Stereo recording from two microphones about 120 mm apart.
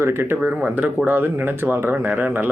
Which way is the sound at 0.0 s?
20° right (ahead or behind).